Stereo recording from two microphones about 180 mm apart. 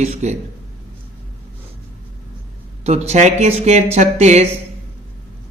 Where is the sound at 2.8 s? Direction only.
35° right (ahead or behind).